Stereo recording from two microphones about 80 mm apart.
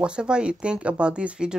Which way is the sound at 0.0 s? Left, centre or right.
Centre.